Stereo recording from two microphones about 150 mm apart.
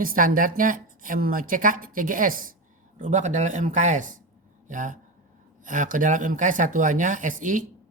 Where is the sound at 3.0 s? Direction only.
55° right (ahead or behind).